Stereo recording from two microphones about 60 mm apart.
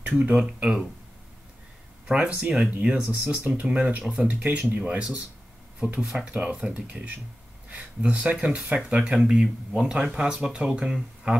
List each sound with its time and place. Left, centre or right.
0.0 s speech: centre
2.0 s speech: centre